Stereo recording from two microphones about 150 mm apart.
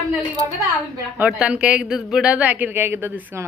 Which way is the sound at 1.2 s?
5° right (ahead or behind).